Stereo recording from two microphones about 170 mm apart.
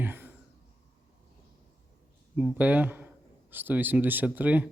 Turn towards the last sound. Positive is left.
turn(degrees=-10)  # may be behind; listen again after turning